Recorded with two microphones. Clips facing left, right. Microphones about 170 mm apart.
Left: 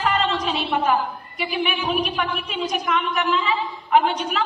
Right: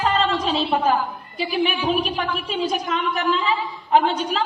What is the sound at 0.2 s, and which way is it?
A woman's voice, 30° right (ahead or behind).